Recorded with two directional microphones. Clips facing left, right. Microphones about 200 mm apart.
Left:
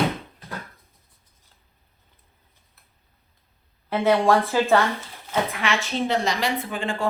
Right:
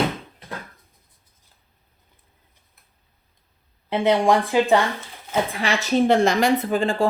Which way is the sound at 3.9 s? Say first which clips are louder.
Right 1 dB; 15° right (ahead or behind).